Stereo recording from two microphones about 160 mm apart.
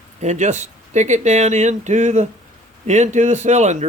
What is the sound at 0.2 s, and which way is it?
Speech, 45° right (ahead or behind).